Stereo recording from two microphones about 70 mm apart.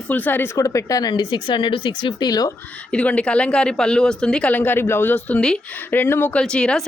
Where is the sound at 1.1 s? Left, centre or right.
Left.